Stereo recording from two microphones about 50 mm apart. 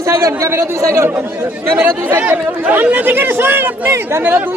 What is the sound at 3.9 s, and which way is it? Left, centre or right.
Speech, right.